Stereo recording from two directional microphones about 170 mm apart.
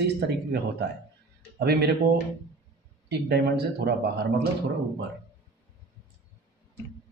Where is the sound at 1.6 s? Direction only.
75° right (ahead or behind).